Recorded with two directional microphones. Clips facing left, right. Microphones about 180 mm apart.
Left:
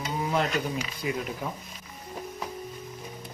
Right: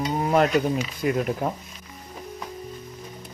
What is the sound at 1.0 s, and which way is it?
Speech, 55° right (ahead or behind).